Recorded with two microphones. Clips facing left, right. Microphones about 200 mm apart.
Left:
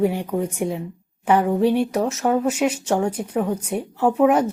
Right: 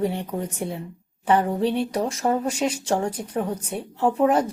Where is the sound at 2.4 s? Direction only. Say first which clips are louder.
Left 3 dB; 5° left (ahead or behind).